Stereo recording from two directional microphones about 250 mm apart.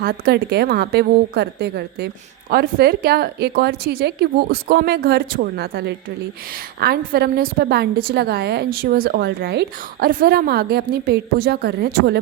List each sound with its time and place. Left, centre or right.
0.0 s a woman's voice: right